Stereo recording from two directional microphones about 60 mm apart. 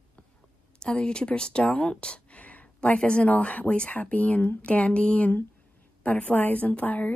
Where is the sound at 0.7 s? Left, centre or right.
Centre.